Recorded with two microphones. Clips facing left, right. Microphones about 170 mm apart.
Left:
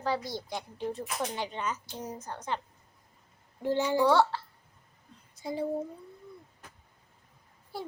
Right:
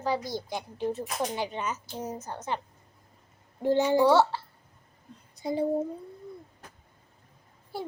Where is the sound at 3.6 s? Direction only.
20° right (ahead or behind).